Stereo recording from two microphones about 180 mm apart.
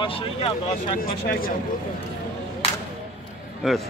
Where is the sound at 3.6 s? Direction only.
Centre (ahead or behind).